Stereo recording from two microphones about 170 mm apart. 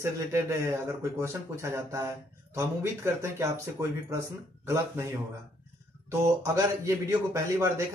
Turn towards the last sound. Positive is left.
turn(degrees=-15)  # may be behind; listen again after turning